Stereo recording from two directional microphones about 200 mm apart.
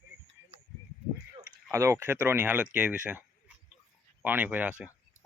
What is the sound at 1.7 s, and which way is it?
Speech, 15° right (ahead or behind).